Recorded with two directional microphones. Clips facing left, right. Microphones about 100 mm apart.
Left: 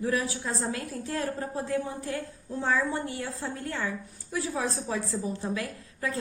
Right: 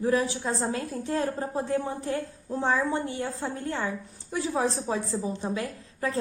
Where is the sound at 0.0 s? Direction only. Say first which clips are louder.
Right 4 dB; 30° right (ahead or behind).